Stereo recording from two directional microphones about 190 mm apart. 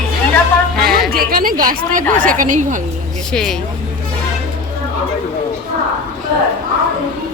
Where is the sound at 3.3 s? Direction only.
5° left (ahead or behind).